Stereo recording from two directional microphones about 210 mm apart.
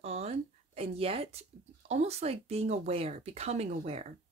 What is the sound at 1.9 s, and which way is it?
Speech, 30° right (ahead or behind).